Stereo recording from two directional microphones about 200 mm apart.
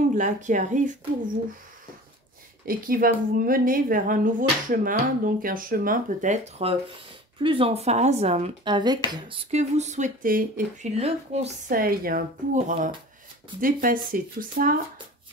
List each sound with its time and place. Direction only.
0.1 s speech: 40° right (ahead or behind)
2.6 s a woman's voice: 45° right (ahead or behind)
11.0 s a woman's voice: 35° right (ahead or behind)